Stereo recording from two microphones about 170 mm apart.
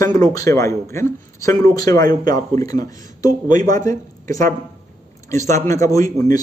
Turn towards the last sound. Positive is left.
turn(degrees=20)  # may be behind; listen again after turning